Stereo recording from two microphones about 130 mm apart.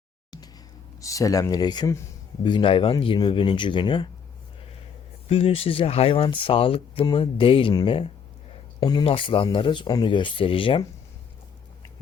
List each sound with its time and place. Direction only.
0.3 s music: 30° left (ahead or behind)
1.0 s speech: 25° left (ahead or behind)
5.3 s speech: 45° left (ahead or behind)